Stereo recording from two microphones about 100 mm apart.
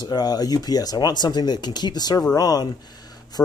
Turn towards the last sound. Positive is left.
turn(degrees=40)  # may be behind; listen again after turning